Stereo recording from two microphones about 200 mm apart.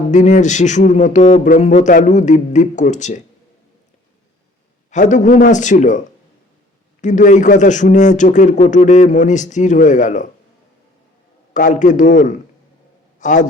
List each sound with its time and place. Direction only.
0.1 s a man's voice: 35° left (ahead or behind)
4.9 s a man's voice: 40° left (ahead or behind)
7.0 s a man's voice: 40° left (ahead or behind)
11.5 s a man's voice: 40° left (ahead or behind)